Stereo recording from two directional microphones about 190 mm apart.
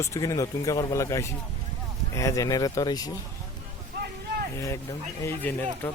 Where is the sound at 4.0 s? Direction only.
60° right (ahead or behind).